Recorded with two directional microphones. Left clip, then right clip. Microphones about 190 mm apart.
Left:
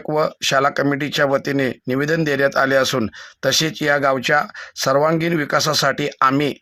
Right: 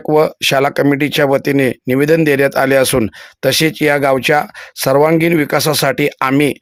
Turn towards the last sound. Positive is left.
turn(degrees=-30)  # may be behind; listen again after turning